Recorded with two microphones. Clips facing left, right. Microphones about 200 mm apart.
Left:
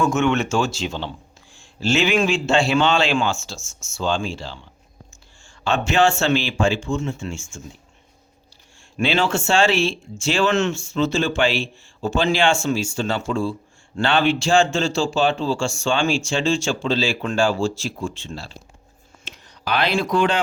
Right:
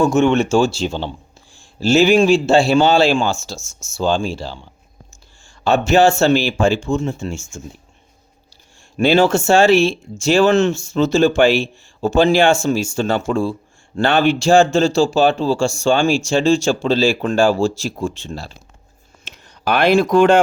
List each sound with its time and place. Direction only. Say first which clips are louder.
0.0 s speech: right 5 dB; 30° right (ahead or behind)
5.6 s speech: right 5 dB; 40° right (ahead or behind)
9.0 s speech: right 7 dB; 40° right (ahead or behind)